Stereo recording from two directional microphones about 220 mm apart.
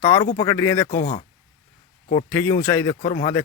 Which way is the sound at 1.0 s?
35° left (ahead or behind).